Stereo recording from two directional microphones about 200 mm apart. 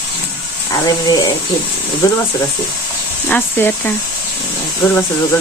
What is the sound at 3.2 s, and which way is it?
Speech, 10° left (ahead or behind).